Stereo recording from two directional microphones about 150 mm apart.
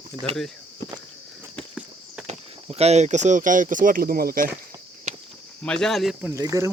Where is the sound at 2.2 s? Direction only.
45° right (ahead or behind); by 4.4 s 75° right (ahead or behind).